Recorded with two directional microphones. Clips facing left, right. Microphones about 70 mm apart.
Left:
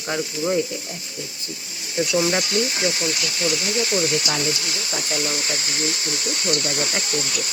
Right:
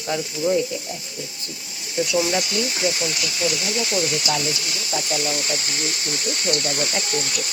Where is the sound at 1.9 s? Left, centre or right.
Left.